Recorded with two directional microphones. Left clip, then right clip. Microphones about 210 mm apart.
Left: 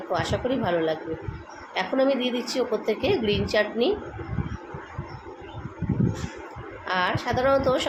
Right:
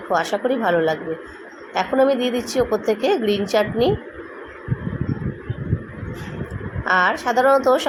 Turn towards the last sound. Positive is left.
turn(degrees=-15)  # may be behind; listen again after turning